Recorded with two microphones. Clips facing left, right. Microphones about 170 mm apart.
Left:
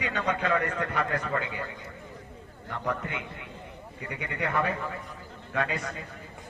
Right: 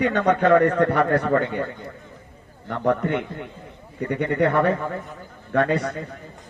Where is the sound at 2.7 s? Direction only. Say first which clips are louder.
Right 11 dB; 65° right (ahead or behind).